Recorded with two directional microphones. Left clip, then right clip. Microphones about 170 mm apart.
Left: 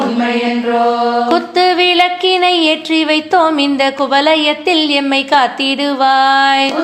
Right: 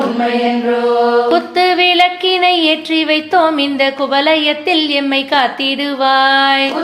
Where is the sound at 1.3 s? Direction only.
25° left (ahead or behind).